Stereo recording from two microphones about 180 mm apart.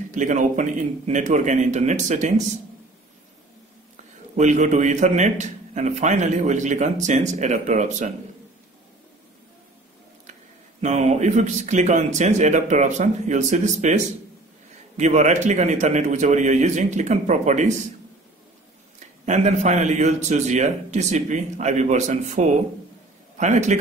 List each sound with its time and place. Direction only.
0.1 s a man's voice: 45° right (ahead or behind)
3.9 s a man's voice: 40° right (ahead or behind)
10.8 s a man's voice: 40° right (ahead or behind)
19.2 s a man's voice: 40° right (ahead or behind)